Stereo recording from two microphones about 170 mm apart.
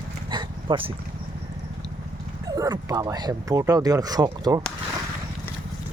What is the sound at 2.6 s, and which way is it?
Speech, 25° right (ahead or behind).